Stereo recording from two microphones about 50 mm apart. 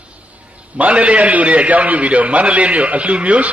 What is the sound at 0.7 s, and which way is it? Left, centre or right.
A man's voice, right.